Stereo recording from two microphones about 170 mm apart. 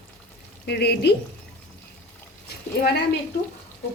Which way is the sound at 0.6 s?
70° left (ahead or behind).